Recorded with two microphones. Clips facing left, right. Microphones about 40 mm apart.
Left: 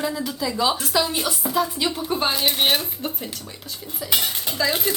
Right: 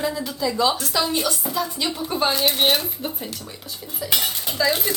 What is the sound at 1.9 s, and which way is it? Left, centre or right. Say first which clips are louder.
Dishes: even; centre.